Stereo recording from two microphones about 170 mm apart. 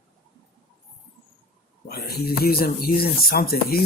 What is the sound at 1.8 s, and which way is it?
Speech, 65° left (ahead or behind).